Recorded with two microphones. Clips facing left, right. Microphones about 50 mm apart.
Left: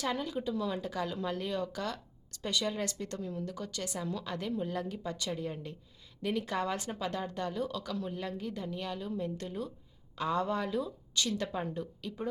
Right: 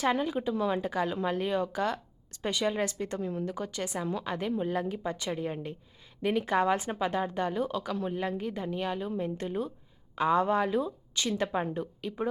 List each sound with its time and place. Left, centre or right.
0.0 s a woman's voice: right